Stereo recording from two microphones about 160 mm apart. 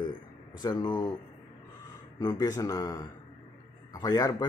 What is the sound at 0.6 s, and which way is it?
Speech, 25° left (ahead or behind).